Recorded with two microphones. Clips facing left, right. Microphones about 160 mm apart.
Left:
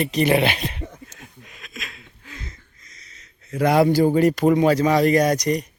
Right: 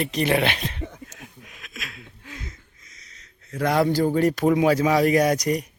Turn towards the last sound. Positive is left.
turn(degrees=-5)  # may be behind; listen again after turning